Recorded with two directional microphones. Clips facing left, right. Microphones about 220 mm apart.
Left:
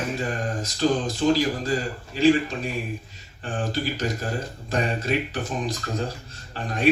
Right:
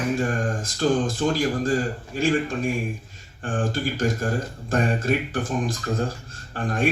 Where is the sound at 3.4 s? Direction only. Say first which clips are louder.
Right 2 dB; 50° right (ahead or behind).